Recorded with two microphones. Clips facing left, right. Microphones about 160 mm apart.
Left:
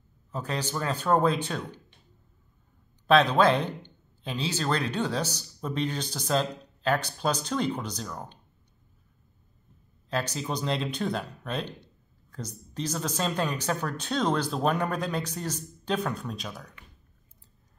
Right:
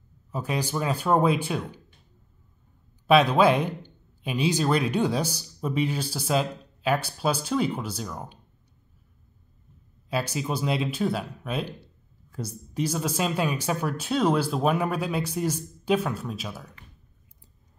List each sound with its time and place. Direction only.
0.3 s speech: 10° right (ahead or behind)
3.1 s speech: 10° right (ahead or behind)
10.0 s speech: 10° right (ahead or behind)